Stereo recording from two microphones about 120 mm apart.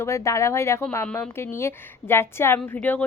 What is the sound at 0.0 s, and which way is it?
A woman's voice, 25° left (ahead or behind).